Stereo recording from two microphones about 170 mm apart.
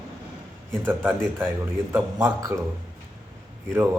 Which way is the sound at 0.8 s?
15° right (ahead or behind).